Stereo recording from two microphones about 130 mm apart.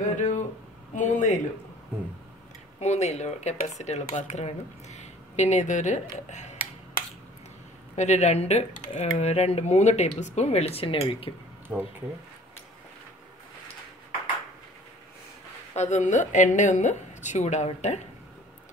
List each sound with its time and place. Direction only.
0.0 s a sound: 70° left (ahead or behind)
0.9 s speech: 70° left (ahead or behind)
2.8 s speech: 60° left (ahead or behind)
7.9 s speech: 60° left (ahead or behind)
11.7 s speech: 15° right (ahead or behind)
15.7 s speech: 65° left (ahead or behind)